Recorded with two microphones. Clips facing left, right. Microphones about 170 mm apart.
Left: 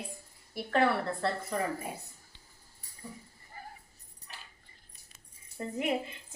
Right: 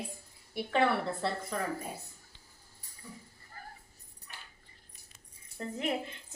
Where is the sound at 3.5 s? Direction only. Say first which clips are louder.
Left 2 dB; 15° left (ahead or behind).